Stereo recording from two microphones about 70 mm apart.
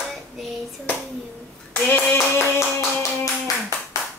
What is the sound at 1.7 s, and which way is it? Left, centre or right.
Clapping, left.